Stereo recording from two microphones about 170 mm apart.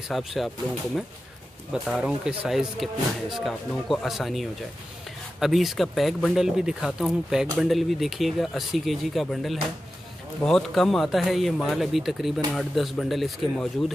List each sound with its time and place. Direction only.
0.1 s speech: centre (ahead or behind)
1.7 s speech: 5° right (ahead or behind)